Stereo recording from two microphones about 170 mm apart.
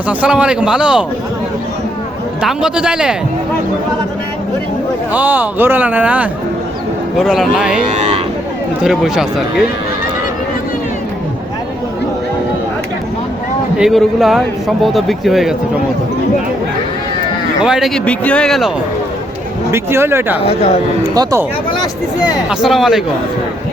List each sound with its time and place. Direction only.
0.1 s speech: 10° right (ahead or behind)
2.4 s speech: 5° right (ahead or behind)
5.1 s speech: 10° right (ahead or behind)
7.9 s speech: 40° right (ahead or behind)
8.8 s speech: 5° right (ahead or behind)
13.7 s speech: centre (ahead or behind)
17.6 s speech: 5° right (ahead or behind)
19.7 s speech: 15° right (ahead or behind)
20.4 s speech: 35° left (ahead or behind)
21.2 s speech: 20° right (ahead or behind)
22.4 s speech: centre (ahead or behind)